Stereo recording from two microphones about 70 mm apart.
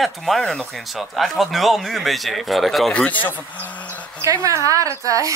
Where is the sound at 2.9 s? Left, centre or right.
Left.